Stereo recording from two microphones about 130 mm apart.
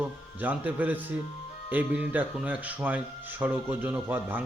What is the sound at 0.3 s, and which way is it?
Speech, 15° right (ahead or behind).